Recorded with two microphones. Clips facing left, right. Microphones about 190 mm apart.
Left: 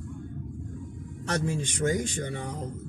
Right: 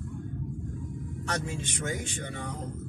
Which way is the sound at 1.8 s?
35° left (ahead or behind).